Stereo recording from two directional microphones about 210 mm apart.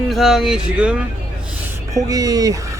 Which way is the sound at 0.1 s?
Centre (ahead or behind).